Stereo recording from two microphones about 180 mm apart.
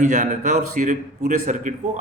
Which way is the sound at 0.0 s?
40° right (ahead or behind).